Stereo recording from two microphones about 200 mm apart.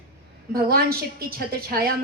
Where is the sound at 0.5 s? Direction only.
50° right (ahead or behind).